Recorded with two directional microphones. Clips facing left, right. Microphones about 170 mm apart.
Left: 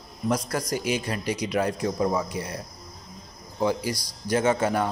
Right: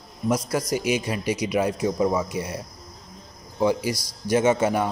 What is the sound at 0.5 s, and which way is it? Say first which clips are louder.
Speech: right 3 dB; 5° right (ahead or behind).